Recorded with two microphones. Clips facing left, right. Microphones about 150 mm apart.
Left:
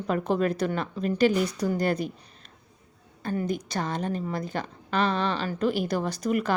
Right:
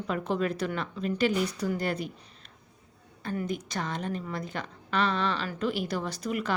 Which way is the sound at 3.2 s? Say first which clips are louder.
Left 4 dB; 35° left (ahead or behind).